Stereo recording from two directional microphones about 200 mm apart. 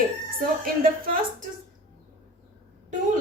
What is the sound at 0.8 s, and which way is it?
Speech, 45° right (ahead or behind).